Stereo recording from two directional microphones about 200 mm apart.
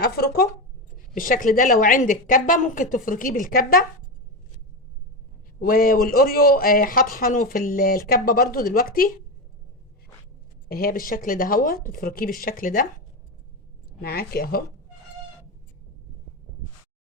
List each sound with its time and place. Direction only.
0.0 s speech: 50° left (ahead or behind)
5.5 s speech: 45° left (ahead or behind)
10.7 s speech: 45° left (ahead or behind)
14.0 s speech: 50° left (ahead or behind)